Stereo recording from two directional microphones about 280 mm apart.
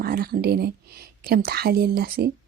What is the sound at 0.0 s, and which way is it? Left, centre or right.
Speech, right.